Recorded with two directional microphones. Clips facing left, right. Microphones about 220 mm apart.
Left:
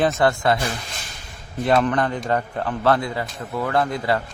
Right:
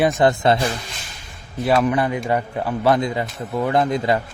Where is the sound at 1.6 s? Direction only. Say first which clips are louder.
Right 1 dB; 5° right (ahead or behind).